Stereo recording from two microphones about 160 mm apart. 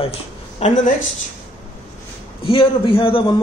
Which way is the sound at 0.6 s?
50° left (ahead or behind).